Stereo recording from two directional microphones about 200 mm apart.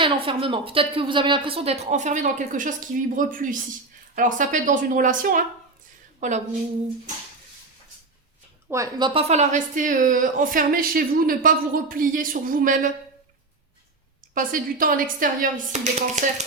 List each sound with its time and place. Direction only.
0.0 s a woman's voice: 25° right (ahead or behind)
8.7 s speech: 20° right (ahead or behind); by 12.9 s 40° right (ahead or behind)
14.3 s a woman's voice: 45° right (ahead or behind)